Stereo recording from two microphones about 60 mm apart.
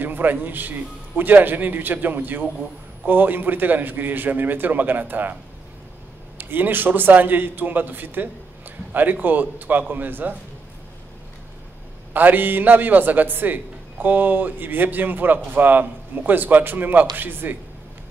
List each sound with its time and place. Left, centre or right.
0.0 s a man's voice: right
6.3 s a man's voice: right
12.1 s a man's voice: right